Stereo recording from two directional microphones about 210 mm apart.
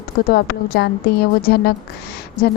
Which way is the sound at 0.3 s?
45° left (ahead or behind).